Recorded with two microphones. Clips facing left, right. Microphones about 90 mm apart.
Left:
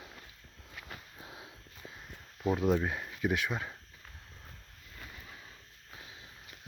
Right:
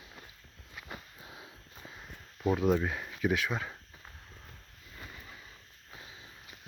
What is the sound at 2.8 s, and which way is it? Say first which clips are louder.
Speech: even; 10° left (ahead or behind).